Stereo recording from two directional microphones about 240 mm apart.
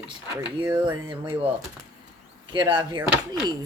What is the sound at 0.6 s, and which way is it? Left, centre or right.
Speech, centre.